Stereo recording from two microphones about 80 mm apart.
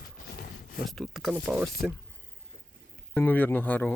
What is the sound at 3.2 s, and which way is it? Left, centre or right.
Speech, left.